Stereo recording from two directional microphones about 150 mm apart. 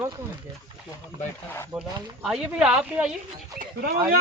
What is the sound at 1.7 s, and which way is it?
Speech, 10° right (ahead or behind).